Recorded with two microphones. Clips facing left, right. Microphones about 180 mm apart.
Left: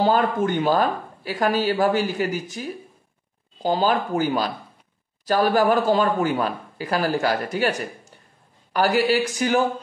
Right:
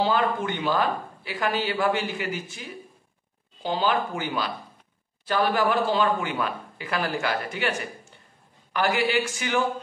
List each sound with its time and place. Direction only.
0.0 s speech: 45° left (ahead or behind)